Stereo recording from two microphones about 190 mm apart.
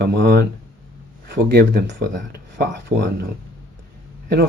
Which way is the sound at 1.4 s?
55° right (ahead or behind).